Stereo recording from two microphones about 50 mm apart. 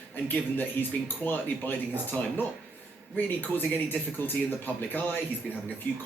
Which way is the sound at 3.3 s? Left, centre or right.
Left.